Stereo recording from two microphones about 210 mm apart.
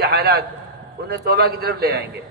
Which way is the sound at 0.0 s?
50° right (ahead or behind).